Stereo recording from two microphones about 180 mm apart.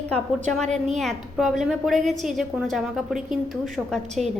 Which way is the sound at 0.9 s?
Centre (ahead or behind).